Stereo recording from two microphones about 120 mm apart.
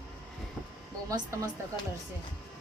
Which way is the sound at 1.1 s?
30° right (ahead or behind).